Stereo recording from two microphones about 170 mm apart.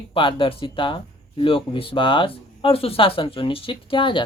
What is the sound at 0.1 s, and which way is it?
Speech, 30° left (ahead or behind).